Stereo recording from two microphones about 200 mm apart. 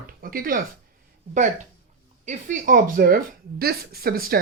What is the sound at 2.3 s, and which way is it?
Speech, 40° right (ahead or behind).